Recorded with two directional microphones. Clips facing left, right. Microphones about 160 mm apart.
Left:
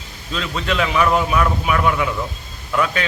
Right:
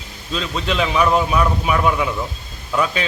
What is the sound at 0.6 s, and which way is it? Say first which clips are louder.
A man's voice: even; 15° right (ahead or behind).